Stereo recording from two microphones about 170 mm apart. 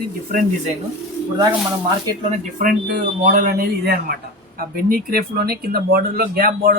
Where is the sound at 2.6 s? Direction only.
50° right (ahead or behind).